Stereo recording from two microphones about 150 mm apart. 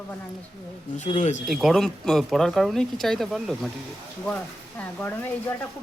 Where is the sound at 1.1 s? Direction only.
50° left (ahead or behind).